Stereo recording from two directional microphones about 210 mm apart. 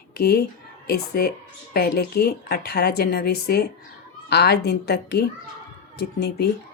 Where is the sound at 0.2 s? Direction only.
45° left (ahead or behind).